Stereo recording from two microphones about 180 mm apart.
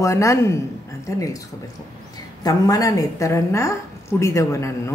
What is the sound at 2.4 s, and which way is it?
Speech, 20° left (ahead or behind).